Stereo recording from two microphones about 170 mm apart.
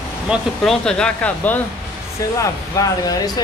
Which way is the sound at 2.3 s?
20° left (ahead or behind).